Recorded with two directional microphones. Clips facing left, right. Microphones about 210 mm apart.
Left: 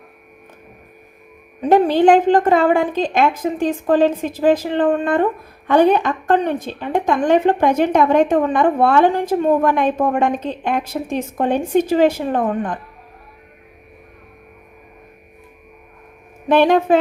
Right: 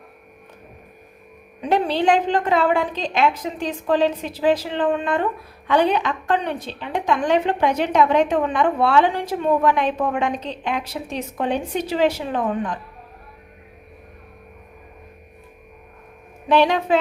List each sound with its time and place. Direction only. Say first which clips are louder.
1.6 s a woman's voice: left 7 dB; 45° left (ahead or behind)
16.5 s a woman's voice: left 4 dB; 50° left (ahead or behind)